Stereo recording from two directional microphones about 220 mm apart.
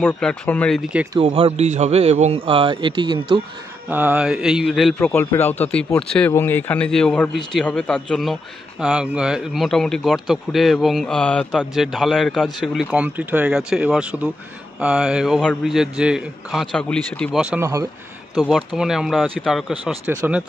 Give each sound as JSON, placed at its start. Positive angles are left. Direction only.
{"t": 0.0, "sound": "a man's voice", "side_deg": 5}
{"t": 1.2, "sound": "a man's voice", "side_deg": -25}
{"t": 3.9, "sound": "a man's voice", "side_deg": -10}
{"t": 18.8, "sound": "a man's voice", "side_deg": 0}